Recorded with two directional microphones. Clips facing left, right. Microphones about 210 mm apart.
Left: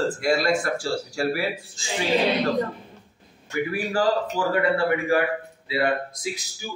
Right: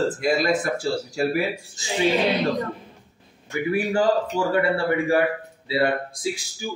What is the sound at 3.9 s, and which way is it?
Speech, 25° right (ahead or behind).